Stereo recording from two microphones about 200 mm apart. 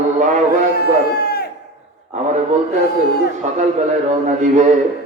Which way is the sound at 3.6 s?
35° right (ahead or behind).